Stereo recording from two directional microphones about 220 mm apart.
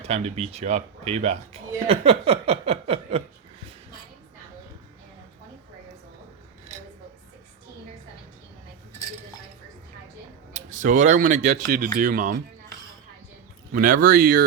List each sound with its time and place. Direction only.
0.0 s speech: 30° right (ahead or behind)
10.5 s speech: 35° right (ahead or behind)
13.7 s speech: 40° right (ahead or behind)